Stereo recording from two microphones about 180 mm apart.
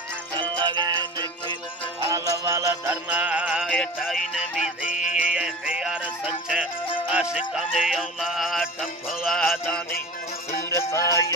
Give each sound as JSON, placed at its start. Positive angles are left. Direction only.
{"t": 0.4, "sound": "music", "side_deg": -25}
{"t": 2.0, "sound": "music", "side_deg": -15}
{"t": 4.8, "sound": "music", "side_deg": 50}
{"t": 5.3, "sound": "music", "side_deg": -5}
{"t": 7.1, "sound": "music", "side_deg": -5}
{"t": 10.5, "sound": "music", "side_deg": 15}